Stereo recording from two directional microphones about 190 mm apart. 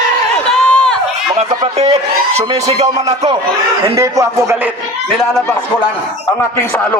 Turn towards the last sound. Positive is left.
turn(degrees=0)  # may be behind; listen again after turning